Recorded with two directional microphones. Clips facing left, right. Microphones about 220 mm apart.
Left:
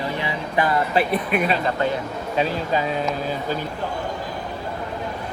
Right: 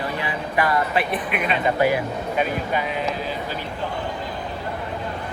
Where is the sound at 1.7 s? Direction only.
10° right (ahead or behind).